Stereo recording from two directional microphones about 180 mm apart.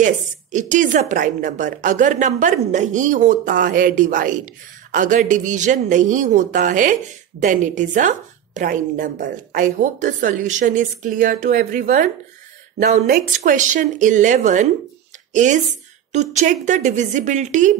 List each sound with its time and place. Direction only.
0.0 s speech: 45° right (ahead or behind)